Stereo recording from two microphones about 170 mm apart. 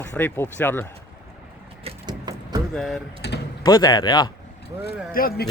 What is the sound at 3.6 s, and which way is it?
Speech, 25° left (ahead or behind).